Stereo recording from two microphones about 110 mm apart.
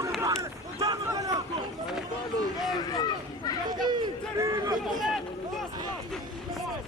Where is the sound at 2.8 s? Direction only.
35° left (ahead or behind).